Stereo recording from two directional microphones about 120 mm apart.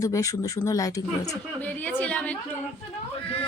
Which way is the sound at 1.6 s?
15° left (ahead or behind).